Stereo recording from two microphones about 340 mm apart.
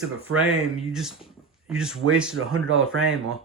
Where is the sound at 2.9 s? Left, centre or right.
Right.